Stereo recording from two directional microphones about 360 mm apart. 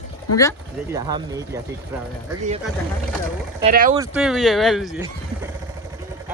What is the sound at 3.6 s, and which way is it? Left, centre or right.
Speech, right.